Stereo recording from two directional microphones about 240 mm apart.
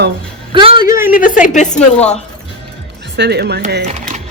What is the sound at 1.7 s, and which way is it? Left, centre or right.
Speech, centre.